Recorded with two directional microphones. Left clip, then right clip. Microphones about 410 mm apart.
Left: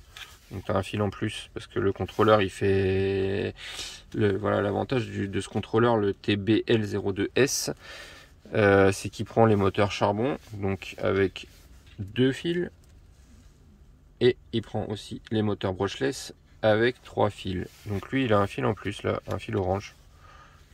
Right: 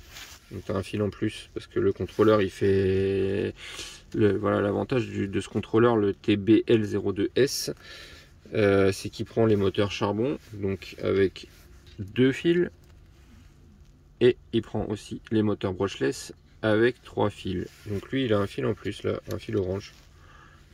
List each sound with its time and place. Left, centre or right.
0.5 s speech: centre
14.1 s speech: centre